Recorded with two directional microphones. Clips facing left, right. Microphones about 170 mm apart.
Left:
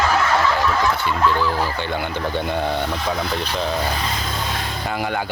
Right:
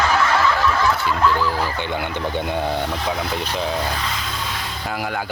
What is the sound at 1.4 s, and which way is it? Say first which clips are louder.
Speech: left 1 dB; 15° right (ahead or behind).